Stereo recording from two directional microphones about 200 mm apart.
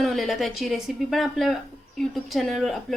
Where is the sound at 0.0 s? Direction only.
Centre (ahead or behind).